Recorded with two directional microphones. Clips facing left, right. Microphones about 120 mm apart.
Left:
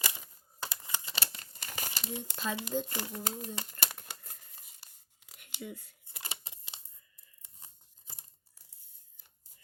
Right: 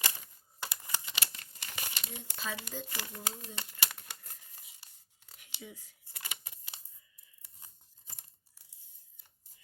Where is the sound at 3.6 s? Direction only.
45° left (ahead or behind).